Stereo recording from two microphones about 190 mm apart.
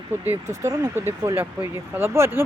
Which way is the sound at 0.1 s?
15° right (ahead or behind).